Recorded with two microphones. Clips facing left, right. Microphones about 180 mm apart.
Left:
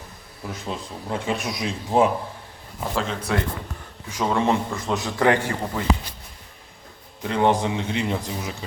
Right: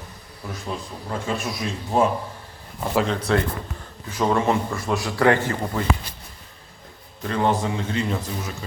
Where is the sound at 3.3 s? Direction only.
10° left (ahead or behind).